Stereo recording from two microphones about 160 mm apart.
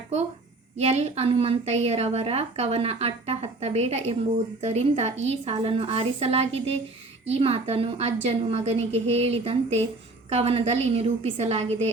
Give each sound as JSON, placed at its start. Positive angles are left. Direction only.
{"t": 0.8, "sound": "a woman's voice", "side_deg": -40}